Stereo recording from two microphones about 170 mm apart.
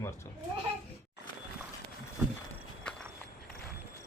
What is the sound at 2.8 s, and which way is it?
Walk, 5° left (ahead or behind).